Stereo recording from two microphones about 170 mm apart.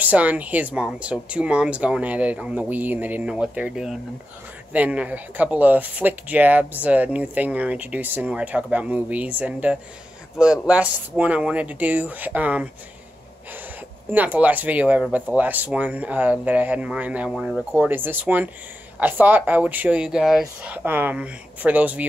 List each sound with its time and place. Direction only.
0.0 s speech: 10° right (ahead or behind)
14.0 s speech: 10° right (ahead or behind)